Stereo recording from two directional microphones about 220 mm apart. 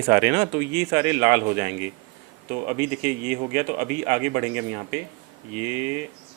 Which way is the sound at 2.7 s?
10° right (ahead or behind).